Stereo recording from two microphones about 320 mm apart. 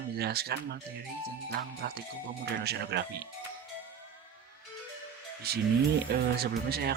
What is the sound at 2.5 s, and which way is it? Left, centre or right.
Speech, right.